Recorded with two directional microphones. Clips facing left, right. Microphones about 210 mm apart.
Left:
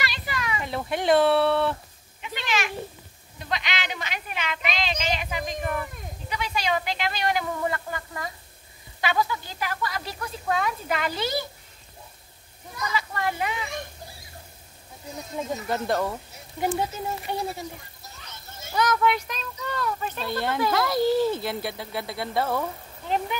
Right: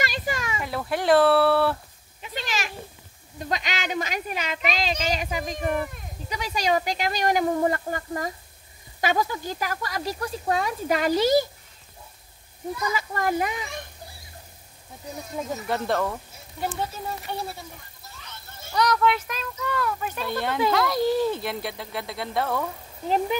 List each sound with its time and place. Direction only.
0.0 s a sound: 45° right (ahead or behind)
0.8 s speech: centre (ahead or behind)
2.2 s a sound: 40° right (ahead or behind)
3.3 s speech: 40° right (ahead or behind)
12.9 s speech: 45° right (ahead or behind)
15.5 s speech: centre (ahead or behind)
17.3 s speech: 15° left (ahead or behind)
18.7 s speech: 5° left (ahead or behind)
23.0 s speech: 35° right (ahead or behind)